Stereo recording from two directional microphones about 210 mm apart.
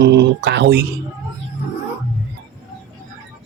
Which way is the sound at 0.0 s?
55° right (ahead or behind).